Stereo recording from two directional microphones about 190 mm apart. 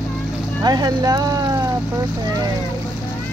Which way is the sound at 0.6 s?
20° right (ahead or behind).